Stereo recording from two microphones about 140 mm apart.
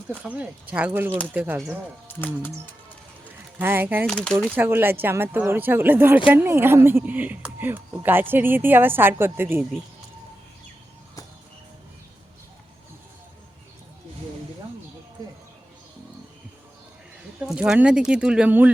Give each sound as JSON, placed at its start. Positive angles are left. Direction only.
{"t": 0.2, "sound": "speech", "side_deg": -10}
{"t": 2.0, "sound": "speech", "side_deg": 15}
{"t": 3.6, "sound": "speech", "side_deg": -15}
{"t": 4.0, "sound": "speech", "side_deg": 5}
{"t": 4.5, "sound": "speech", "side_deg": -15}
{"t": 17.4, "sound": "speech", "side_deg": -5}